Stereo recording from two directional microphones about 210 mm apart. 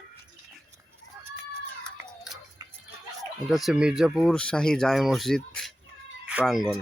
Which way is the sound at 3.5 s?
Centre (ahead or behind).